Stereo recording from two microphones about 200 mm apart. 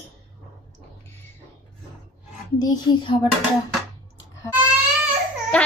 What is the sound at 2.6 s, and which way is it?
Speech, 20° left (ahead or behind).